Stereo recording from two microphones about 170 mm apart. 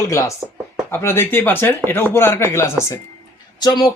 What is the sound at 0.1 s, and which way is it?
Speech, 15° left (ahead or behind).